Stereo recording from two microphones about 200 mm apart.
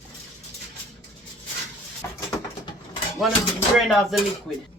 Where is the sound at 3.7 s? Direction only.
Centre (ahead or behind).